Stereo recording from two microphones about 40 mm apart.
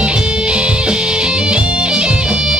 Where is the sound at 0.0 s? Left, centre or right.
Right.